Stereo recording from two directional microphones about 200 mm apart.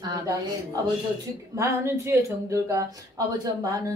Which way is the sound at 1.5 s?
15° right (ahead or behind).